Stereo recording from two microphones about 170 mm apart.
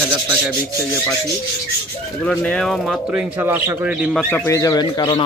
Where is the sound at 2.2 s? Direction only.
5° left (ahead or behind).